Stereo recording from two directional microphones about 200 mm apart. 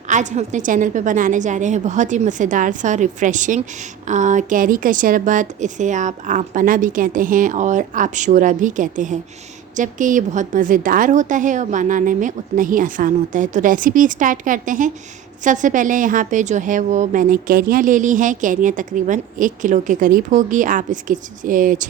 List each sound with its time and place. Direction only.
0.1 s a woman's voice: 35° right (ahead or behind)